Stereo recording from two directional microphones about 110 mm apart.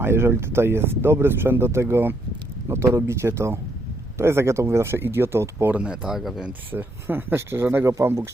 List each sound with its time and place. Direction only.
0.0 s speech: 20° right (ahead or behind)
5.7 s speech: 10° right (ahead or behind)
6.7 s speech: 20° right (ahead or behind)